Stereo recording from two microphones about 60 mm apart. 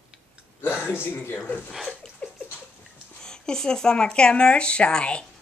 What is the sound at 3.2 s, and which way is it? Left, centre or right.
Speech, centre.